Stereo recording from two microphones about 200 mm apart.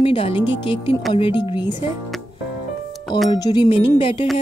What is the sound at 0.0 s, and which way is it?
Speech, 25° left (ahead or behind).